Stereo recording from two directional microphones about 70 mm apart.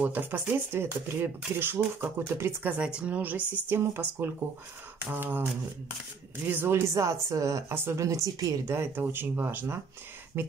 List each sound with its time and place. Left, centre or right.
0.0 s speech: right
2.6 s speech: centre; by 7.6 s right
7.7 s speech: right
8.0 s speech: right
8.6 s speech: right